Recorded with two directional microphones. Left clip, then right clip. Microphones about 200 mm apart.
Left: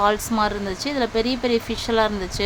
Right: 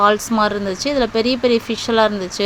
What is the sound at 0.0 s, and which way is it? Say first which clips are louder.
Speech: right 5 dB; 15° right (ahead or behind).